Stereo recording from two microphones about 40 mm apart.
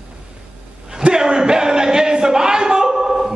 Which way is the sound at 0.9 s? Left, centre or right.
Centre.